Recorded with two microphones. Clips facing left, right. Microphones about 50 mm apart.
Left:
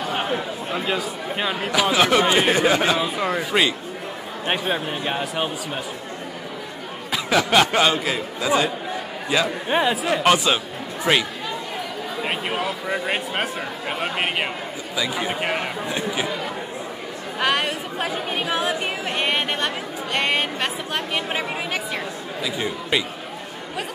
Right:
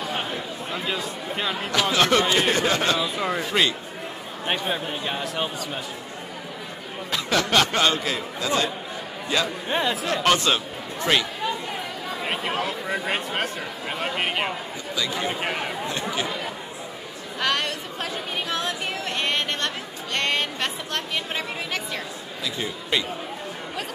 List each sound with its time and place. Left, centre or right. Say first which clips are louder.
0.3 s speech: left 5 dB; centre
7.1 s speech: left 3 dB; centre
12.3 s speech: left 1 dB; centre
17.4 s speech: left 3 dB; centre